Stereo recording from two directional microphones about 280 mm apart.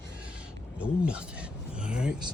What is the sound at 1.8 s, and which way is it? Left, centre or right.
Speech, centre.